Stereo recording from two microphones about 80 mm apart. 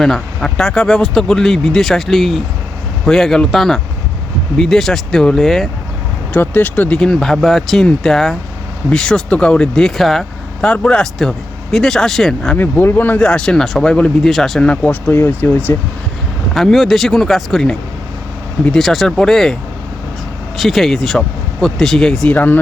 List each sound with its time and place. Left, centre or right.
0.0 s speech: centre
6.3 s speech: left
7.1 s speech: centre
10.6 s speech: centre
12.5 s speech: left; by 14.6 s centre
14.6 s speech: centre
16.6 s speech: centre
18.8 s speech: centre
20.6 s speech: centre
22.4 s speech: left